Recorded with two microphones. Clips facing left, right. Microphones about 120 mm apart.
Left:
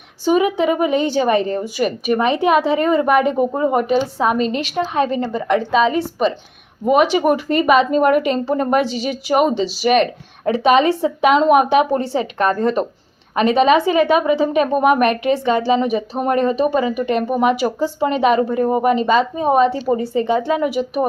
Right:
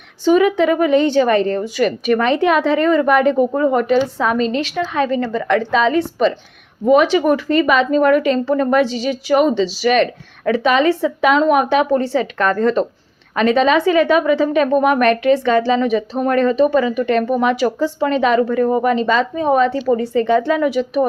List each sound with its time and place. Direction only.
0.3 s a woman's voice: 10° left (ahead or behind)
5.7 s a woman's voice: 10° left (ahead or behind)
18.3 s a woman's voice: 25° left (ahead or behind)
19.7 s a woman's voice: 30° left (ahead or behind)
20.1 s a woman's voice: 10° left (ahead or behind)